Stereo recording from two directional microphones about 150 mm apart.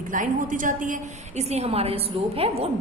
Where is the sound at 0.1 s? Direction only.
60° right (ahead or behind).